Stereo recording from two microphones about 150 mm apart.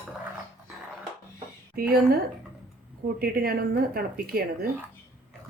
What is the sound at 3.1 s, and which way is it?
Speech, 90° right.